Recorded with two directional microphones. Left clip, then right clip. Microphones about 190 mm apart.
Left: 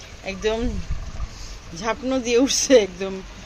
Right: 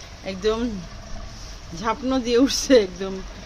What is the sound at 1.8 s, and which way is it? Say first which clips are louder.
Speech: even; 15° right (ahead or behind).